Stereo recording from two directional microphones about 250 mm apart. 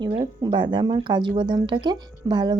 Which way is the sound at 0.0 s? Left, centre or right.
Centre.